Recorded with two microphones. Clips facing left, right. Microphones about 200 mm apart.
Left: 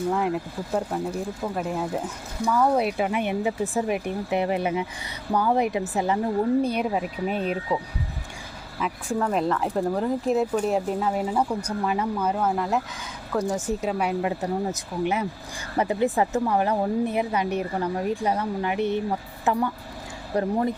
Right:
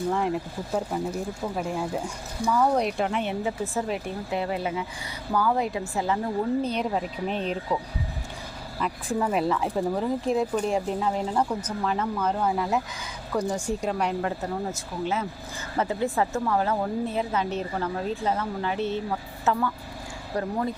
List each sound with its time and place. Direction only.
0.1 s speech: centre (ahead or behind)
8.8 s speech: 5° right (ahead or behind); by 20.7 s 20° left (ahead or behind)